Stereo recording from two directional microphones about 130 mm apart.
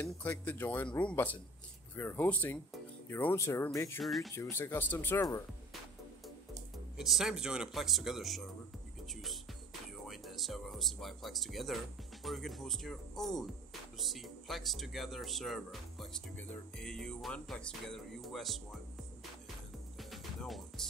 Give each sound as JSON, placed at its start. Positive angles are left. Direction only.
{"t": 0.0, "sound": "speech", "side_deg": 15}
{"t": 4.0, "sound": "speech", "side_deg": 0}
{"t": 4.4, "sound": "speech", "side_deg": 15}
{"t": 7.0, "sound": "speech", "side_deg": 0}
{"t": 20.0, "sound": "music", "side_deg": 0}